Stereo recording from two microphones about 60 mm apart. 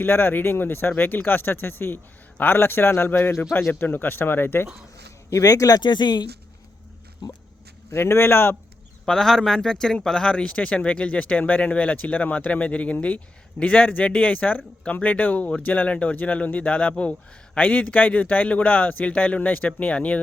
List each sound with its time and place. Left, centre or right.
0.0 s speech: left
5.3 s speech: left
7.9 s speech: left
9.0 s speech: centre
10.3 s speech: left